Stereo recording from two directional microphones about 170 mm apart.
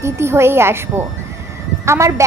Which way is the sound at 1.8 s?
15° right (ahead or behind).